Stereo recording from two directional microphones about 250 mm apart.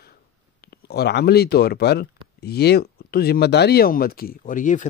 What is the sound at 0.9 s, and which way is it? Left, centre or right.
Speech, left.